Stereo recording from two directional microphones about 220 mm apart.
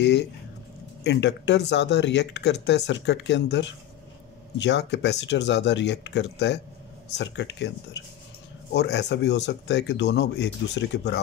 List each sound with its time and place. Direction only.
0.0 s speech: 50° left (ahead or behind)